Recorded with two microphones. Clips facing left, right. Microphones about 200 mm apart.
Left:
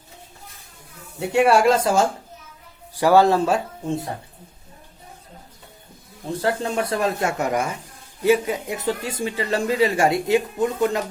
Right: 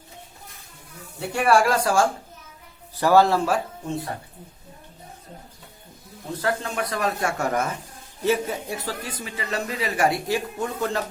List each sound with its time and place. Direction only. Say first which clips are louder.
1.3 s speech: left 4 dB; 25° left (ahead or behind)
6.4 s speech: left 3 dB; 30° left (ahead or behind)